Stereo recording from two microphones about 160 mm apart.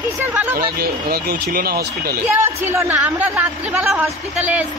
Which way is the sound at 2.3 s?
15° right (ahead or behind).